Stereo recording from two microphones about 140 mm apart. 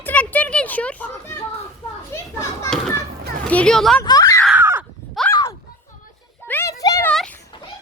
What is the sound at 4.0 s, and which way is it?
Speech, 25° left (ahead or behind).